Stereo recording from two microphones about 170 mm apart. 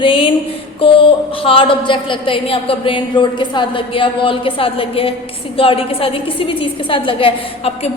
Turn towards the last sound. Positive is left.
turn(degrees=35)  # may be behind; listen again after turning